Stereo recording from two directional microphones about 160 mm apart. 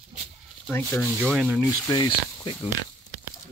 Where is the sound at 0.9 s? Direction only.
5° right (ahead or behind).